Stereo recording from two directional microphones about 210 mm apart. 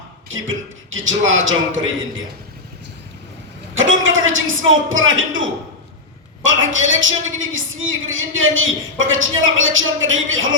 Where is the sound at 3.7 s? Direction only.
65° right (ahead or behind).